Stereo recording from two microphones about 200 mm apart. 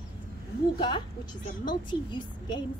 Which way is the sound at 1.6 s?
25° left (ahead or behind).